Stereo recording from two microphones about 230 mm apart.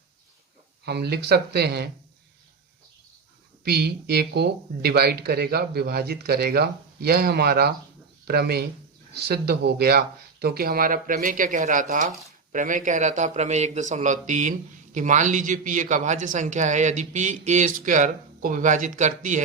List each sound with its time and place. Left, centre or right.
0.9 s speech: right
3.6 s speech: right